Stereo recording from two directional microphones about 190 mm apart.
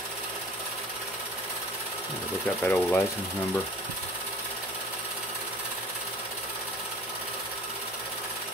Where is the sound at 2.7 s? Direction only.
10° left (ahead or behind).